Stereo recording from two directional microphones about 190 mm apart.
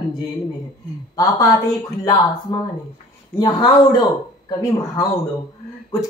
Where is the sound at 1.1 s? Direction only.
20° left (ahead or behind).